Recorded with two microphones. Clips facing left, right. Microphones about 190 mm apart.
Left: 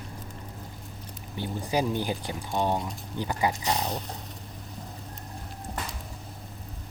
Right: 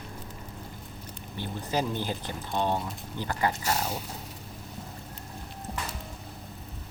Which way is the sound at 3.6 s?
5° right (ahead or behind).